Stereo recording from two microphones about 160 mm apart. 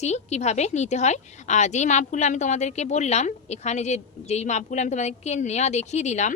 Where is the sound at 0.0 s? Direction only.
45° left (ahead or behind).